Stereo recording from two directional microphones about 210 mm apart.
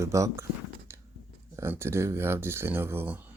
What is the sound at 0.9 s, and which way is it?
Biting, 10° right (ahead or behind).